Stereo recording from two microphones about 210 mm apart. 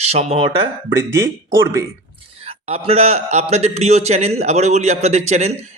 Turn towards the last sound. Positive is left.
turn(degrees=-30)  # may be behind; listen again after turning